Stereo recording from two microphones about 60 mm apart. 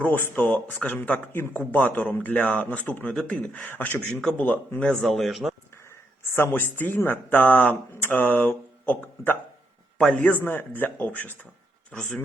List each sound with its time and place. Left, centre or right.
0.0 s speech: left
0.8 s a man's voice: centre
1.3 s speech: left
1.5 s speech: left
4.1 s speech: centre
4.4 s speech: left
4.8 s speech: centre
6.2 s speech: left
10.0 s a man's voice: centre
10.2 s speech: left
11.9 s speech: centre